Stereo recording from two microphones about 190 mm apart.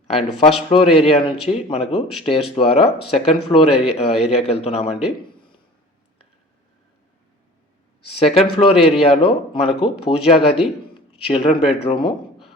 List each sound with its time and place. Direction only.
0.1 s speech: 30° left (ahead or behind)
8.0 s speech: 30° left (ahead or behind)